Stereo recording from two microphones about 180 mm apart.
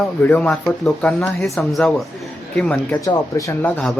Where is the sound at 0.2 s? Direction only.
10° left (ahead or behind).